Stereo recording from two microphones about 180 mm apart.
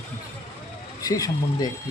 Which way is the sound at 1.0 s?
20° left (ahead or behind).